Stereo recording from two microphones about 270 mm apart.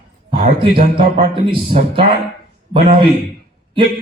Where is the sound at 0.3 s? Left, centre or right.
Right.